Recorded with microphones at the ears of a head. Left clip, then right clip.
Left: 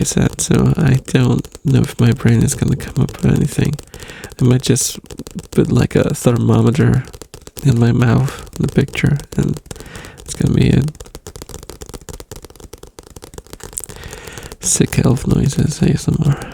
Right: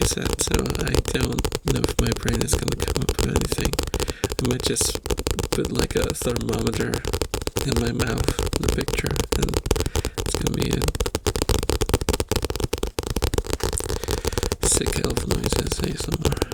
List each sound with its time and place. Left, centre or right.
0.0 s speech: left
14.7 s speech: left